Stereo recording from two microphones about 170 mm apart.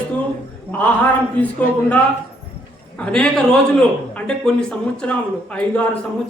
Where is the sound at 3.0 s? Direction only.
5° left (ahead or behind).